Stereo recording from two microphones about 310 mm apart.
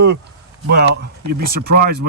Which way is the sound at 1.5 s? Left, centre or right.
Right.